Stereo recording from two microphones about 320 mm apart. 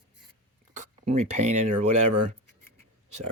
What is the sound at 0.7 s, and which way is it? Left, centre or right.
Speech, right.